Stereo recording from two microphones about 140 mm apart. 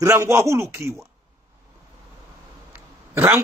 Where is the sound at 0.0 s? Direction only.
20° right (ahead or behind).